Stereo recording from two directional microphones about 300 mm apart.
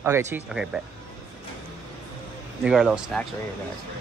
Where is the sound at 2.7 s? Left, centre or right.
Centre.